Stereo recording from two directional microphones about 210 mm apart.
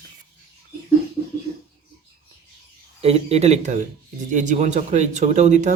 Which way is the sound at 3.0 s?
30° right (ahead or behind).